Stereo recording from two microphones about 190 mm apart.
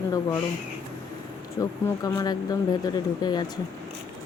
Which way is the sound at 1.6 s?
20° left (ahead or behind).